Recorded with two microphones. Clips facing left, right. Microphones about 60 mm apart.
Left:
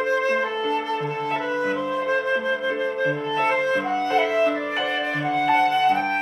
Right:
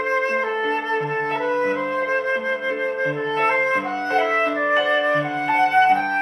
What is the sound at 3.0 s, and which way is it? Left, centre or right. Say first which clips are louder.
Clarinet: right 2 dB; right.